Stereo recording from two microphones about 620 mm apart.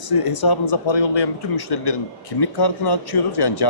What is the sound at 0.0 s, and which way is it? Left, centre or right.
Speech, left.